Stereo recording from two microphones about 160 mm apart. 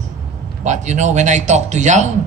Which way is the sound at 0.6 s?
50° right (ahead or behind).